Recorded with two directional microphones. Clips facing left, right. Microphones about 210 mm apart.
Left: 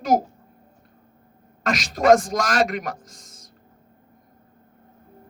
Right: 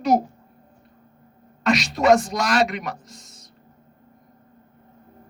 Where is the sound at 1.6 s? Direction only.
50° left (ahead or behind).